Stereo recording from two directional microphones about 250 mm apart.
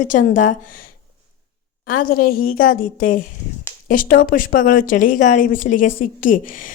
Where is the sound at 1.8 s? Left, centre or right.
Left.